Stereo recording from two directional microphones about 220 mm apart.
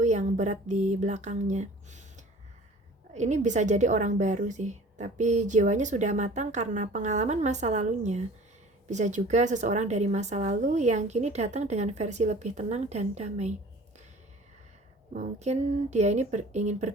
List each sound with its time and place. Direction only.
0.0 s a woman's voice: 30° right (ahead or behind)
15.1 s a woman's voice: 35° right (ahead or behind)